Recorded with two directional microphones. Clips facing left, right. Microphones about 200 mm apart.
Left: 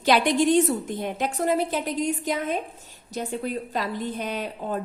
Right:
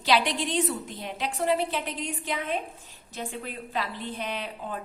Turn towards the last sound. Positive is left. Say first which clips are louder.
# left 5 dB
turn(degrees=45)  # may be behind; listen again after turning